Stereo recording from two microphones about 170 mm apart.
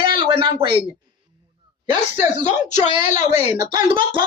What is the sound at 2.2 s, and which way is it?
Speech, 45° left (ahead or behind).